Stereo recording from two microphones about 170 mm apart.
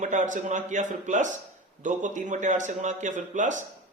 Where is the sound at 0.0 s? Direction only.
45° right (ahead or behind).